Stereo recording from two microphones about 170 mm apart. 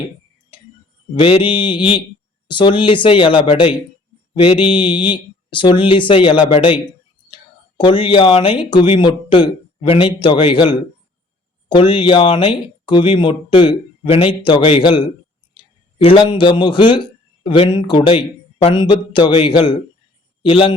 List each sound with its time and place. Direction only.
1.1 s mantra: 30° left (ahead or behind)
2.5 s speech: 30° left (ahead or behind)
3.4 s mantra: 35° left (ahead or behind)
4.4 s speech: 30° left (ahead or behind)
7.8 s speech: 30° left (ahead or behind)
11.7 s mantra: 30° left (ahead or behind)
12.8 s speech: 30° left (ahead or behind)
16.0 s speech: 25° left (ahead or behind)
20.4 s mantra: 30° left (ahead or behind)